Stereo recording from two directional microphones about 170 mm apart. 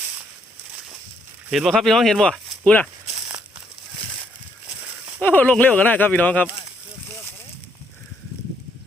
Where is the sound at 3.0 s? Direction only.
20° right (ahead or behind).